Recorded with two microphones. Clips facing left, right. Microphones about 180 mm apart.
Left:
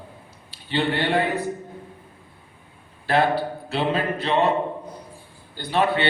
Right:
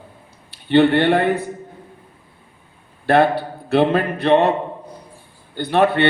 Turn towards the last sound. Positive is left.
turn(degrees=-55)  # may be behind; listen again after turning